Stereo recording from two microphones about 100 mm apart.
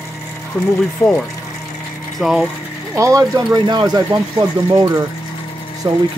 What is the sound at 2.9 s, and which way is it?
Speech, 30° right (ahead or behind).